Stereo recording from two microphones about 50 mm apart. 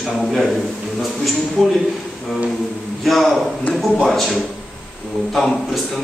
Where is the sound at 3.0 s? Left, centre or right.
Centre.